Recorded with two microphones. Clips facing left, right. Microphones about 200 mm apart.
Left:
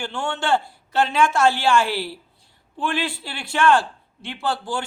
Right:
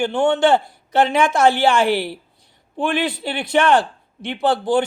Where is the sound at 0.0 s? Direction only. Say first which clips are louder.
Right 10 dB; 20° right (ahead or behind).